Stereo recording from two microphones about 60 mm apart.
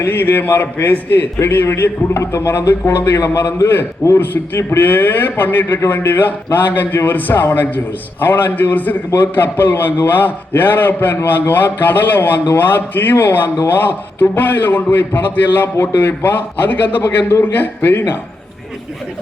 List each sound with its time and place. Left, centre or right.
0.0 s a man's voice: left
4.8 s a man's voice: left